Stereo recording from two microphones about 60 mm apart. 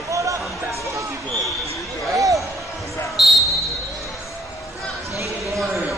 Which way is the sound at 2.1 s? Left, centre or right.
Right.